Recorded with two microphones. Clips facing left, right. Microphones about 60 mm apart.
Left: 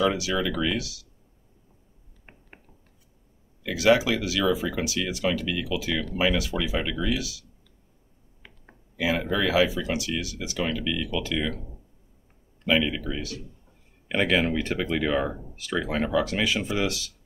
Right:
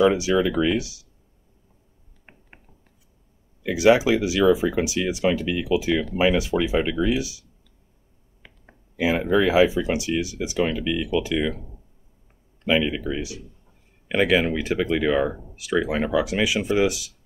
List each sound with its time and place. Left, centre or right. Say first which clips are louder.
0.0 s speech: right 6 dB; right
3.6 s speech: right 4 dB; right
8.9 s speech: right 5 dB; right
12.6 s speech: right 2 dB; centre
14.0 s speech: right 3 dB; centre